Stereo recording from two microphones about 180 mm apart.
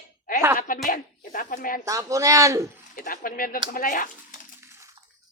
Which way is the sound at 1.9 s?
20° right (ahead or behind).